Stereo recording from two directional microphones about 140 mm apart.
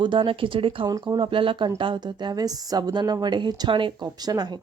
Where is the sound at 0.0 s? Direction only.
35° right (ahead or behind).